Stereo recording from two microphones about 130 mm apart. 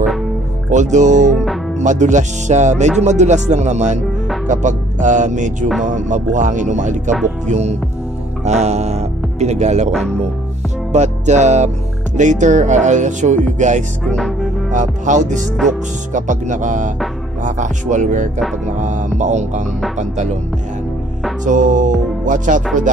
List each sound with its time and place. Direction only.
0.7 s speech: 70° right (ahead or behind)
10.9 s music: 65° right (ahead or behind)
12.2 s speech: 70° right (ahead or behind)
14.0 s music: 5° left (ahead or behind)
14.7 s speech: 70° right (ahead or behind)
18.7 s music: 70° right (ahead or behind)
20.0 s speech: 65° right (ahead or behind)
21.5 s speech: 80° right